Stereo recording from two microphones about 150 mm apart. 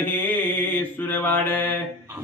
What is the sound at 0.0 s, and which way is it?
Mantra, 10° left (ahead or behind).